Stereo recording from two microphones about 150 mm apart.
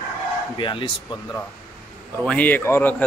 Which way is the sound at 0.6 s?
35° left (ahead or behind).